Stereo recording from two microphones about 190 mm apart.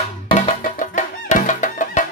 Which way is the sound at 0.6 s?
40° left (ahead or behind).